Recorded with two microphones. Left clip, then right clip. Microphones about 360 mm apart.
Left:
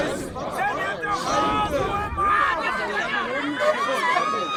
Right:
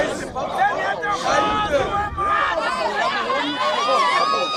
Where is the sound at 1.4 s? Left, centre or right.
Centre.